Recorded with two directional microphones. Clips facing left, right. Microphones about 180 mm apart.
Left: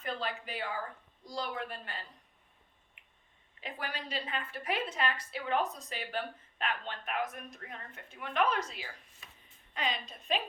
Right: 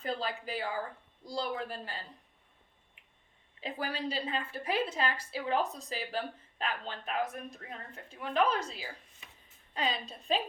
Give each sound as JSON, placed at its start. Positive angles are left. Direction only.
{"t": 0.0, "sound": "a sound", "side_deg": -35}
{"t": 1.2, "sound": "a woman's voice", "side_deg": -30}
{"t": 3.6, "sound": "a woman's voice", "side_deg": -30}